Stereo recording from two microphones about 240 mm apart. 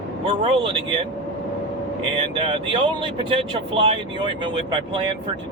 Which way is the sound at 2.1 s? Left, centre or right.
Right.